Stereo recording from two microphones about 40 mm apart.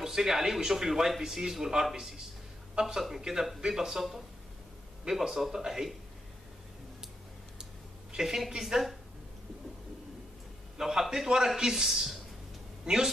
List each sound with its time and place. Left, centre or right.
0.0 s speech: centre
5.2 s speech: centre
8.1 s speech: centre
10.8 s a woman's voice: centre